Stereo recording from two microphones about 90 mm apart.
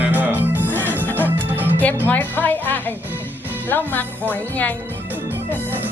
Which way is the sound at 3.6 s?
20° left (ahead or behind).